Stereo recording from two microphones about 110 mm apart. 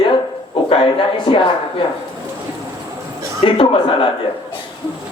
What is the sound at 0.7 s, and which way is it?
Speech, 50° left (ahead or behind).